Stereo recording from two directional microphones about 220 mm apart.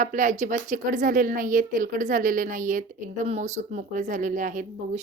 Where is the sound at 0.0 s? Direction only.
35° right (ahead or behind).